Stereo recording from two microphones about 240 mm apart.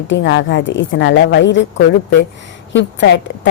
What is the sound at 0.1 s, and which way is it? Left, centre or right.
A woman's voice, left.